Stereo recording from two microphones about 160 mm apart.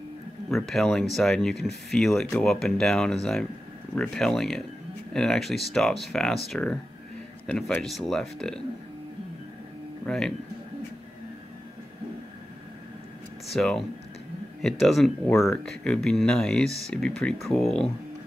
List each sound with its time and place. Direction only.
0.5 s speech: centre (ahead or behind)
10.0 s speech: 5° left (ahead or behind)
13.5 s speech: centre (ahead or behind)